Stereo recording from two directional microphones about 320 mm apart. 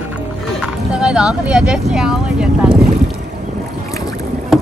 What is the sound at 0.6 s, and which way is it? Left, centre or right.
Speech, centre.